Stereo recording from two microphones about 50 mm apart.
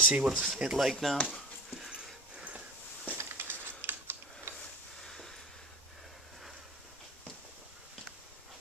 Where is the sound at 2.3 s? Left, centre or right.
Right.